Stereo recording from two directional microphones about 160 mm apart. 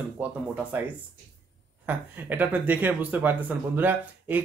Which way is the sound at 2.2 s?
10° right (ahead or behind).